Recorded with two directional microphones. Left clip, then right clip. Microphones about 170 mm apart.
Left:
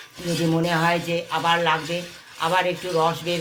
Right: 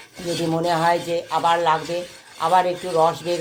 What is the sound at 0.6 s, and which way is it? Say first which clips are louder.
Speech: right 5 dB; 55° right (ahead or behind).